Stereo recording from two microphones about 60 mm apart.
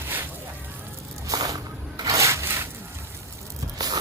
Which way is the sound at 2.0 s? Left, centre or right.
Right.